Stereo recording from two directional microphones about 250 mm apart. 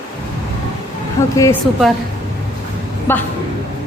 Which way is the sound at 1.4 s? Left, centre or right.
Centre.